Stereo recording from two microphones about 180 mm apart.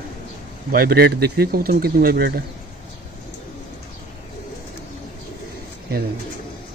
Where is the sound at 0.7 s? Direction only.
60° right (ahead or behind).